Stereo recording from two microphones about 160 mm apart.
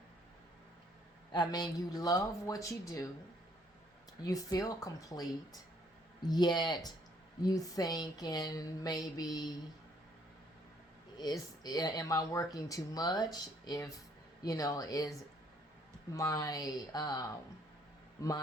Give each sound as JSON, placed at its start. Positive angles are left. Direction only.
{"t": 1.3, "sound": "speech", "side_deg": 25}
{"t": 4.2, "sound": "speech", "side_deg": 20}
{"t": 11.2, "sound": "speech", "side_deg": 25}
{"t": 16.1, "sound": "speech", "side_deg": 20}